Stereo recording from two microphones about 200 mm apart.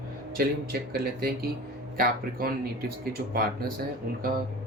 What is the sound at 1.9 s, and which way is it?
Speech, 45° right (ahead or behind).